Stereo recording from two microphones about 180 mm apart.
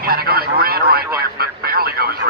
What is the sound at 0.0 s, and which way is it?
Radio, 60° right (ahead or behind).